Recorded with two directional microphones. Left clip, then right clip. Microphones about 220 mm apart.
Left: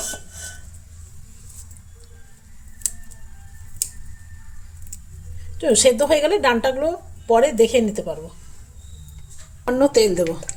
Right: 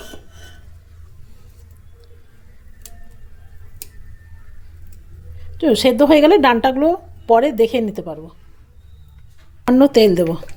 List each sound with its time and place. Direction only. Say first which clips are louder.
5.5 s speech: right 2 dB; 25° right (ahead or behind)
9.6 s speech: right 4 dB; 40° right (ahead or behind)